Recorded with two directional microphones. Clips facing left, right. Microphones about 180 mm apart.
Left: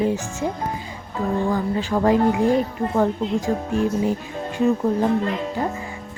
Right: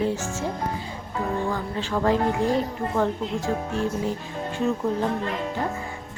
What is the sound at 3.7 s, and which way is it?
Speech, 15° left (ahead or behind).